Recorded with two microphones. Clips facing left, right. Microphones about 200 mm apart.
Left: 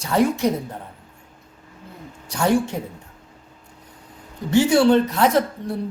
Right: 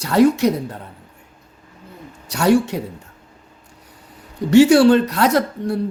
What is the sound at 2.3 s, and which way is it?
Speech, 75° right (ahead or behind).